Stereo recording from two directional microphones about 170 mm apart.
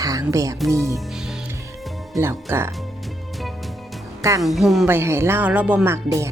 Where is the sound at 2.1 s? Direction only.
15° right (ahead or behind).